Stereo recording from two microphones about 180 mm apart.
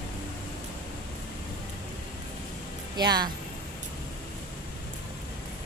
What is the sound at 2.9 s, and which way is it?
Speech, 25° right (ahead or behind).